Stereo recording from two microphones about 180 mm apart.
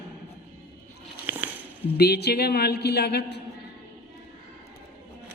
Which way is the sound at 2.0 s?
65° left (ahead or behind).